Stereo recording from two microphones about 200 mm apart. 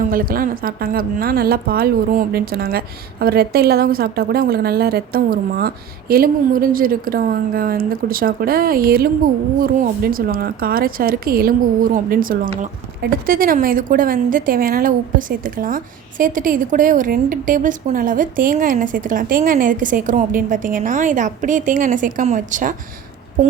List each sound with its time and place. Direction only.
0.0 s a woman's voice: 45° right (ahead or behind)